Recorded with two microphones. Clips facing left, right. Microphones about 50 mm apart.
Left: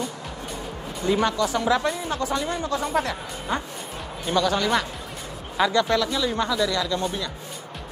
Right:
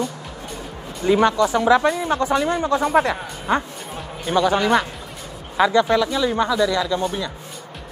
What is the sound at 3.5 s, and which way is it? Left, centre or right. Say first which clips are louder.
Speech: right 7 dB; right.